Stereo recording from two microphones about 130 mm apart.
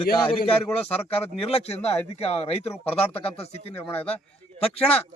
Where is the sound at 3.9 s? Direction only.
15° left (ahead or behind).